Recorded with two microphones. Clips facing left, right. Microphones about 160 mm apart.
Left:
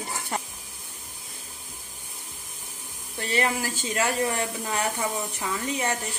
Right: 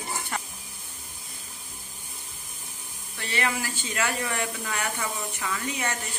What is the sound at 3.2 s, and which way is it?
Speech, 35° left (ahead or behind).